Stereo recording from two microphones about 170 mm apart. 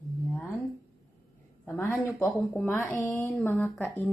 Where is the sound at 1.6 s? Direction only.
10° left (ahead or behind).